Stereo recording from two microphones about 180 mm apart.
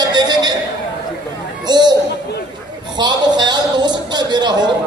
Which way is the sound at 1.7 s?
25° right (ahead or behind).